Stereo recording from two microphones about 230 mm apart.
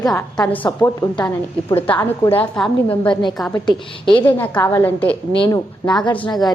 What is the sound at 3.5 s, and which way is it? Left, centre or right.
Speech, centre.